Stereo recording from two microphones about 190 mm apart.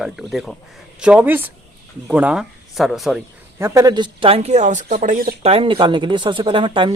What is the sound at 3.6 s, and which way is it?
Speech, 20° right (ahead or behind).